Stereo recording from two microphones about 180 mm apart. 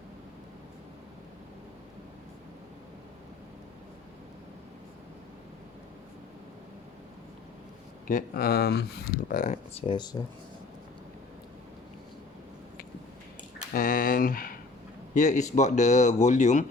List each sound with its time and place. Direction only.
8.0 s speech: 50° left (ahead or behind); by 10.2 s 25° left (ahead or behind)
13.7 s speech: 50° left (ahead or behind)